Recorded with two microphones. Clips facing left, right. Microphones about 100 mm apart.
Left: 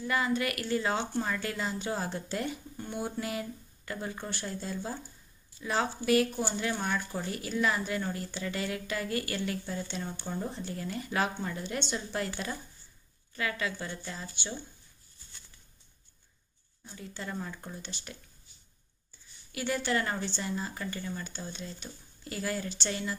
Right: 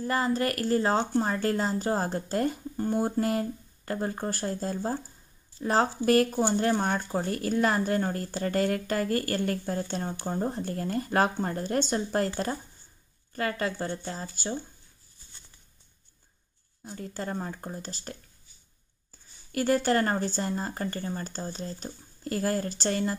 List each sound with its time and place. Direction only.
0.0 s a woman's voice: 40° right (ahead or behind)
16.8 s a woman's voice: 45° right (ahead or behind)
19.5 s speech: 45° right (ahead or behind)